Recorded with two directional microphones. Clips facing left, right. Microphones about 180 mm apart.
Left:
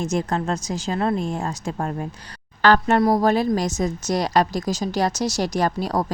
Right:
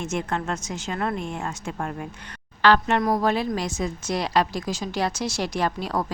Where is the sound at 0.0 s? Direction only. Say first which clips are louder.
Left 4 dB; 35° left (ahead or behind).